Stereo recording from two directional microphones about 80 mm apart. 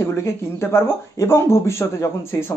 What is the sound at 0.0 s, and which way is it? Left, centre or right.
A man's voice, left.